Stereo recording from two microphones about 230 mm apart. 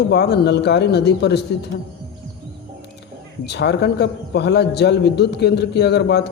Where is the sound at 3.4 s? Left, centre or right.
Left.